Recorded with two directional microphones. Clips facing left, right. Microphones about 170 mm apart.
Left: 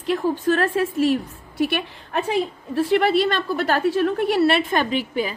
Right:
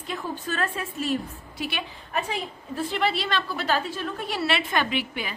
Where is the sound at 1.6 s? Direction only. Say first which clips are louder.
Left 10 dB; 60° left (ahead or behind).